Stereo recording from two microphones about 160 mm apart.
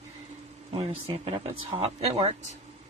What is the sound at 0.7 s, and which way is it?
Speech, 35° right (ahead or behind).